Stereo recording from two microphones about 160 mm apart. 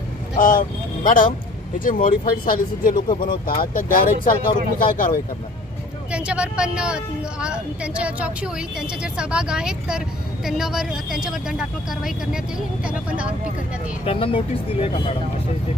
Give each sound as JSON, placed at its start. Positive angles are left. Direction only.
{"t": 0.3, "sound": "speech", "side_deg": 60}
{"t": 6.1, "sound": "a woman's voice", "side_deg": -5}
{"t": 14.0, "sound": "speech", "side_deg": 35}